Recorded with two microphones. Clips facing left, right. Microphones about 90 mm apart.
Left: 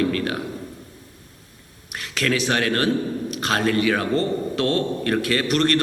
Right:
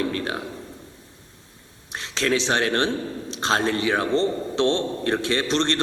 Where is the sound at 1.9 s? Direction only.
25° right (ahead or behind).